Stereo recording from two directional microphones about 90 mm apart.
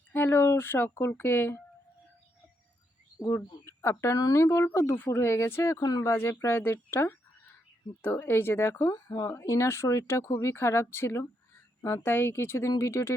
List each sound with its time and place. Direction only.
0.1 s speech: 25° left (ahead or behind)
3.2 s speech: 35° left (ahead or behind)